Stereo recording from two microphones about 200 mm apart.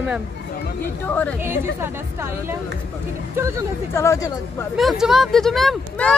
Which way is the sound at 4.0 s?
15° left (ahead or behind).